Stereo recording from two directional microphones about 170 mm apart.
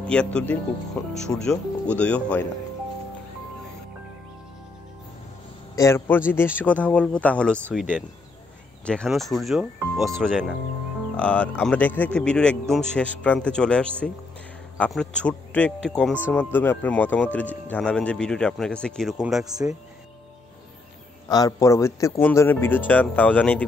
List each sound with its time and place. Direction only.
0.0 s a man's voice: 5° left (ahead or behind)
5.8 s a man's voice: 15° left (ahead or behind)
8.8 s a man's voice: 5° left (ahead or behind)
21.3 s a man's voice: 20° left (ahead or behind)